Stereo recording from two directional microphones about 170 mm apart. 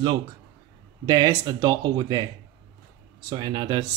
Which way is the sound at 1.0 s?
20° right (ahead or behind).